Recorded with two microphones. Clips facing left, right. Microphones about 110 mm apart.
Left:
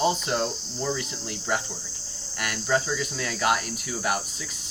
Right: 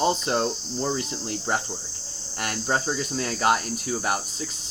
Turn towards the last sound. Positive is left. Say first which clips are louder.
# right 2 dB
turn(degrees=-30)  # may be behind; listen again after turning